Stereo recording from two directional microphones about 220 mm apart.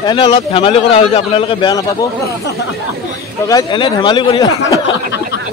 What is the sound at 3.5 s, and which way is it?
A man's voice, 20° left (ahead or behind).